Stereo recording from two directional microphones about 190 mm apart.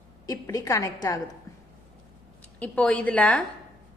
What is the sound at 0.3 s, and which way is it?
Speech, 20° left (ahead or behind).